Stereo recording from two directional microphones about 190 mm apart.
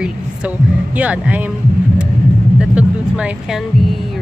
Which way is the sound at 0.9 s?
5° right (ahead or behind).